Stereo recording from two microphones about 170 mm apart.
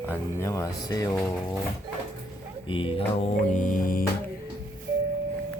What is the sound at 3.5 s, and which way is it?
Music, 50° left (ahead or behind).